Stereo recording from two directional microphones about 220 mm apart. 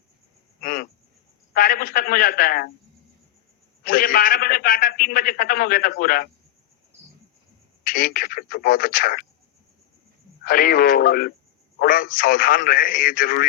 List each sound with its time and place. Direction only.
0.6 s a sound: 40° left (ahead or behind)
1.5 s a man's voice: 40° left (ahead or behind)
3.8 s a man's voice: 40° left (ahead or behind)
7.9 s a man's voice: 40° left (ahead or behind)
10.4 s a man's voice: 40° left (ahead or behind)